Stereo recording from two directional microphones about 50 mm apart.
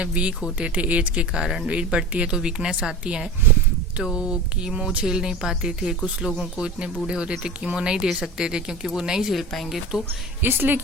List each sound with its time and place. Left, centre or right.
0.0 s speech: right
1.4 s speech: centre
1.6 s speech: right; by 9.8 s centre
10.4 s a woman's voice: right